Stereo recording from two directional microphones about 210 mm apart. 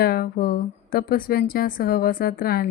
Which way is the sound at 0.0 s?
45° left (ahead or behind).